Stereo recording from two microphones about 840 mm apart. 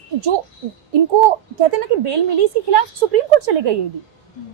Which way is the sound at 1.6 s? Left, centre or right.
Right.